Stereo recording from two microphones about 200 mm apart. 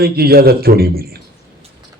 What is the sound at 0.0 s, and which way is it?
A man's voice, 50° right (ahead or behind).